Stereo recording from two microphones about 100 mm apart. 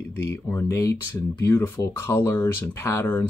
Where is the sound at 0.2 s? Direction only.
25° left (ahead or behind).